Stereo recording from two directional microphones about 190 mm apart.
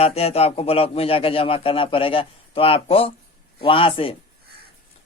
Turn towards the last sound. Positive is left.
turn(degrees=30)  # may be behind; listen again after turning